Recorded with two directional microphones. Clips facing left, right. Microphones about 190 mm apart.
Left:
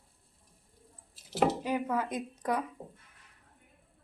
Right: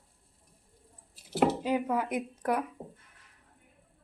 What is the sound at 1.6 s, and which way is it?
A woman's voice, 15° right (ahead or behind).